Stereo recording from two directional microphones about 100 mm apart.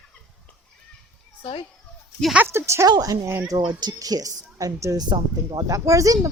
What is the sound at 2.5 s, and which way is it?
Speech, 25° right (ahead or behind).